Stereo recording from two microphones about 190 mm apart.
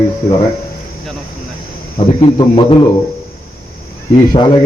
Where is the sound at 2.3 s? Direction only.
25° left (ahead or behind).